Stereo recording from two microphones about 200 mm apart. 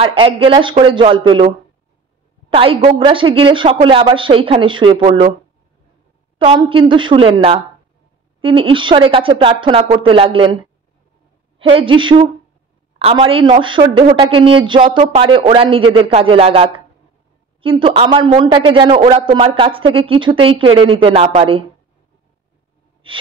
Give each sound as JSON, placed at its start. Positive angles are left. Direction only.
{"t": 0.0, "sound": "a man's voice", "side_deg": -25}
{"t": 2.5, "sound": "a man's voice", "side_deg": -25}
{"t": 6.3, "sound": "a man's voice", "side_deg": -25}